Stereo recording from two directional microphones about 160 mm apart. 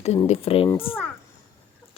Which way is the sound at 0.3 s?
35° left (ahead or behind).